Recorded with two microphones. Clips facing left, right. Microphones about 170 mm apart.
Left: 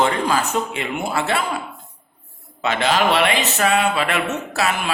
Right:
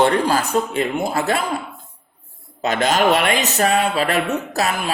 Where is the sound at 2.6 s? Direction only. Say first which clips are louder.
Right 2 dB; 40° right (ahead or behind).